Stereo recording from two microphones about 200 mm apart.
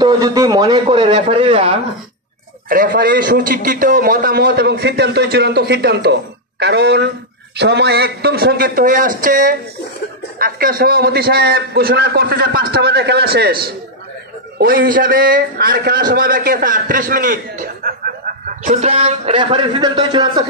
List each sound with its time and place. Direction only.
0.0 s a man's voice: 15° right (ahead or behind)
2.7 s a man's voice: 45° right (ahead or behind)
18.7 s a man's voice: 35° right (ahead or behind)